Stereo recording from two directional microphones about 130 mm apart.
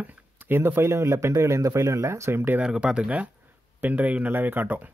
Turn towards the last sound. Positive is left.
turn(degrees=-15)  # may be behind; listen again after turning